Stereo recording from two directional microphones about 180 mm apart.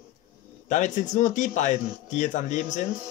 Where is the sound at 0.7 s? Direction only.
45° left (ahead or behind).